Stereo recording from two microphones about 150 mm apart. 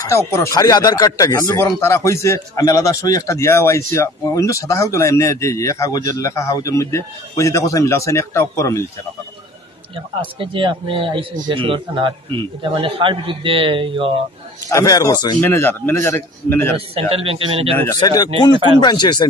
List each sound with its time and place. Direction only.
0.0 s speech: 20° left (ahead or behind)
10.4 s a man's voice: 35° right (ahead or behind)
14.7 s a man's voice: 20° left (ahead or behind)
17.1 s a man's voice: 40° right (ahead or behind)
17.7 s speech: 20° left (ahead or behind)